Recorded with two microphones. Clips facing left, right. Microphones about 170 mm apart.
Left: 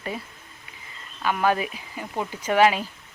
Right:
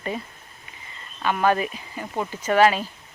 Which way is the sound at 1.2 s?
5° left (ahead or behind).